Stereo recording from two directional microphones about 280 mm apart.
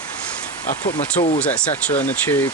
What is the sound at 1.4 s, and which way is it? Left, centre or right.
Frying, centre.